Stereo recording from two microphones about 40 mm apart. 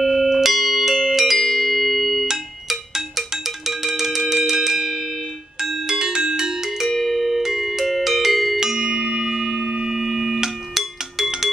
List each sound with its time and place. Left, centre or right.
0.0 s music: centre
6.8 s music: centre
8.5 s music: centre
8.9 s a sound: centre
10.8 s music: centre